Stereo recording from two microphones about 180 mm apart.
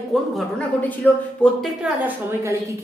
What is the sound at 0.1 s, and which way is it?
A woman's voice, 5° left (ahead or behind).